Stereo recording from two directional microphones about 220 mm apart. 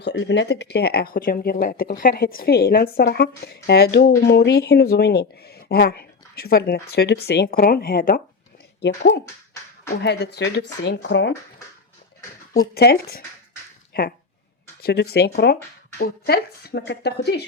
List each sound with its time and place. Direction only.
0.0 s speech: 55° left (ahead or behind)
10.0 s speech: 50° left (ahead or behind)
12.5 s speech: 45° left (ahead or behind)
14.8 s speech: 45° left (ahead or behind)